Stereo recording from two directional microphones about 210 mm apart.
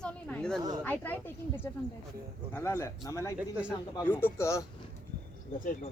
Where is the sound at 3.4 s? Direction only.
5° right (ahead or behind).